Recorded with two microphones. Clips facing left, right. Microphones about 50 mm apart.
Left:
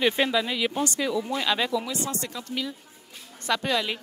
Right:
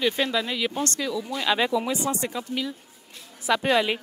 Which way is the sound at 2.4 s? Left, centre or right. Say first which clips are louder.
Right 2 dB; centre.